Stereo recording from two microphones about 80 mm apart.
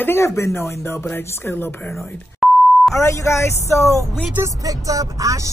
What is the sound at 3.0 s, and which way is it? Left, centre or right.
Speech, left.